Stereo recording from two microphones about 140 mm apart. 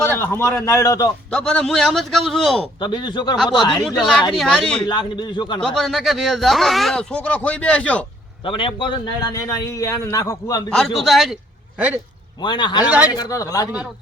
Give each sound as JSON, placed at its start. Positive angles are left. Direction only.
{"t": 0.0, "sound": "a man's voice", "side_deg": 15}
{"t": 1.3, "sound": "speech", "side_deg": 5}
{"t": 2.8, "sound": "a man's voice", "side_deg": 35}
{"t": 3.8, "sound": "speech", "side_deg": 5}
{"t": 4.9, "sound": "a man's voice", "side_deg": 35}
{"t": 5.5, "sound": "speech", "side_deg": 5}
{"t": 8.4, "sound": "a man's voice", "side_deg": 40}
{"t": 10.7, "sound": "speech", "side_deg": 5}
{"t": 12.4, "sound": "a man's voice", "side_deg": 35}
{"t": 12.8, "sound": "speech", "side_deg": -10}
{"t": 13.1, "sound": "a man's voice", "side_deg": 25}